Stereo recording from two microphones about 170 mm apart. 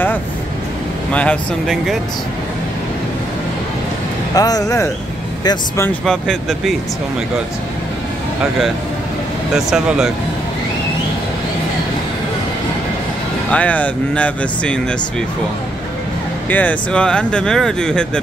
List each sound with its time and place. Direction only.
1.1 s speech: 5° left (ahead or behind)
4.4 s speech: 20° left (ahead or behind)
6.0 s speech: 5° left (ahead or behind)
9.7 s speech: 5° right (ahead or behind)
13.5 s speech: 10° left (ahead or behind)
16.4 s speech: 10° left (ahead or behind)